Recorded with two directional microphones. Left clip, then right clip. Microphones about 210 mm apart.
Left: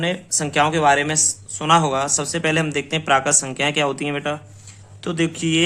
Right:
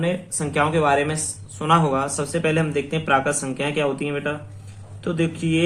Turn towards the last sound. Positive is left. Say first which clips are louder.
# left 2 dB
turn(degrees=55)  # may be behind; listen again after turning